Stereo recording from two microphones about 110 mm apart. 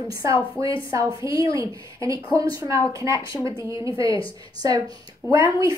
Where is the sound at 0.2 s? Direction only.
30° right (ahead or behind).